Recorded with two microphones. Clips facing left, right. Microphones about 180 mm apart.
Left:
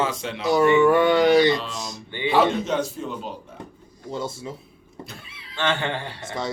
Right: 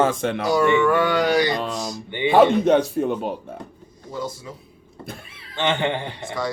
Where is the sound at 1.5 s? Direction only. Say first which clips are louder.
Right 4 dB; 50° right (ahead or behind).